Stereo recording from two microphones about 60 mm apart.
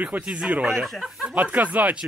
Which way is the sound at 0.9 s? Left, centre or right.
Centre.